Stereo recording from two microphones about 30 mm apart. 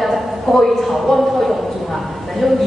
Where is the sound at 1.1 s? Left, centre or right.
Centre.